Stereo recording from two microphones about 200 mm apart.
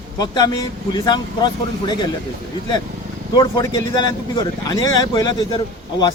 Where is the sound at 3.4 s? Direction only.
20° left (ahead or behind).